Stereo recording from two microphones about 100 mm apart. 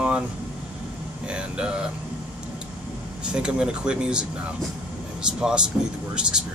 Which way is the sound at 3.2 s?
10° right (ahead or behind).